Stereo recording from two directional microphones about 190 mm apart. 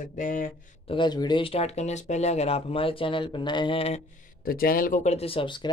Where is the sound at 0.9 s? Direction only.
25° left (ahead or behind).